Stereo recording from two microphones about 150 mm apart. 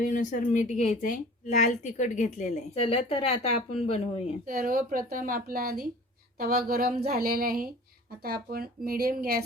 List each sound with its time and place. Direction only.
0.1 s a woman's voice: 60° left (ahead or behind); by 4.1 s 40° left (ahead or behind)
4.4 s a woman's voice: 70° right (ahead or behind)
6.4 s speech: 90° right
8.2 s speech: 90° right